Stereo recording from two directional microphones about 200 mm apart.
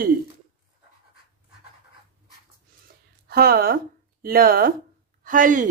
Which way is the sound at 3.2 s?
50° right (ahead or behind).